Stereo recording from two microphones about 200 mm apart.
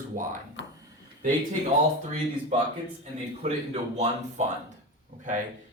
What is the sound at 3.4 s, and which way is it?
A man's voice, 35° right (ahead or behind).